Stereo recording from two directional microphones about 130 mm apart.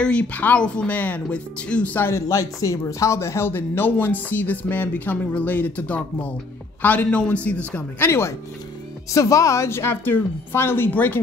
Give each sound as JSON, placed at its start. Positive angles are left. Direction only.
{"t": 0.0, "sound": "a woman's voice", "side_deg": 10}